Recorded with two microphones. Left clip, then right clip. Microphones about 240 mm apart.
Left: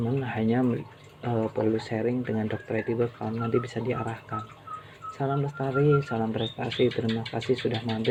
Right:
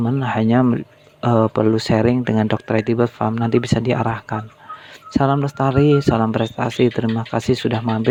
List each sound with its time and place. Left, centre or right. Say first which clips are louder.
0.2 s speech: right 11 dB; right